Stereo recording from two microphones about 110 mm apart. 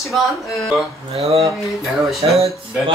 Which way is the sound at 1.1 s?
65° right (ahead or behind).